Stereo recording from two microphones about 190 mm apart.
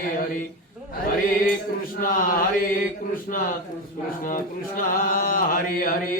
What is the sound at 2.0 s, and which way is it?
Chant, 45° left (ahead or behind).